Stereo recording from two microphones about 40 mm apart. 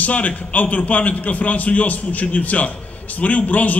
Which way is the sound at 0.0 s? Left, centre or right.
Left.